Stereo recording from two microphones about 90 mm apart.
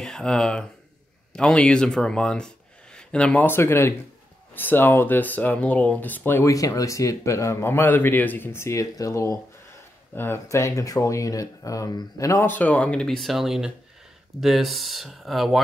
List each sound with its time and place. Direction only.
0.0 s speech: 5° left (ahead or behind)
3.4 s speech: 25° left (ahead or behind)
6.4 s a man's voice: 35° left (ahead or behind)
10.1 s a man's voice: 25° left (ahead or behind)
12.4 s speech: 15° left (ahead or behind); by 15.6 s centre (ahead or behind)